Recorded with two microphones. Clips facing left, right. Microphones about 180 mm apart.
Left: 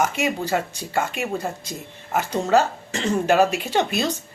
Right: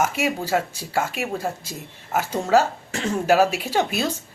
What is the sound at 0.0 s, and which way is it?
Speech, 5° right (ahead or behind).